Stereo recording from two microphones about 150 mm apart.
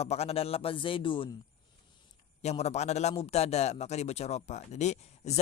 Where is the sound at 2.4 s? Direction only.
45° left (ahead or behind).